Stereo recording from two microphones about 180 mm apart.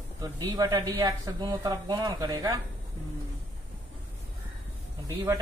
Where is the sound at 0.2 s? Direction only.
20° right (ahead or behind).